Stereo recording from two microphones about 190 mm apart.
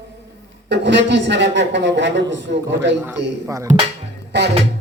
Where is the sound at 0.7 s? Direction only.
65° right (ahead or behind).